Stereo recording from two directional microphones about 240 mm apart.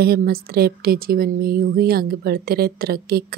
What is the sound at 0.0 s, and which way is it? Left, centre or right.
Speech, right.